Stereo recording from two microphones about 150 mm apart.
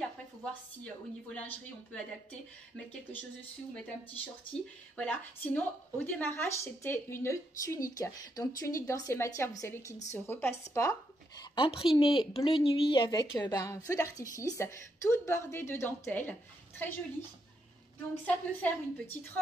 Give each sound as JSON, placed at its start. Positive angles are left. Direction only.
{"t": 1.3, "sound": "a woman's voice", "side_deg": 10}
{"t": 4.9, "sound": "a woman's voice", "side_deg": 10}
{"t": 11.5, "sound": "a woman's voice", "side_deg": 35}
{"t": 18.2, "sound": "a woman's voice", "side_deg": 10}